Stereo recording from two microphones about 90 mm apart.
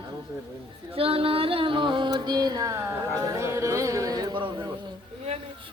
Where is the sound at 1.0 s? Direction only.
90° right; by 2.9 s 35° right (ahead or behind).